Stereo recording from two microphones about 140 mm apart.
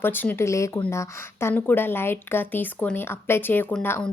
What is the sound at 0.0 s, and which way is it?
A woman's voice, 15° left (ahead or behind).